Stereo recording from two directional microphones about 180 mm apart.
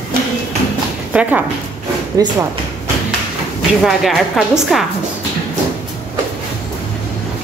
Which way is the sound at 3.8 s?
Centre (ahead or behind).